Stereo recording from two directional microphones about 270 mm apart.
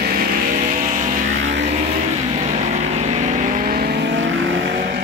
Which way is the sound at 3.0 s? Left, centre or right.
Right.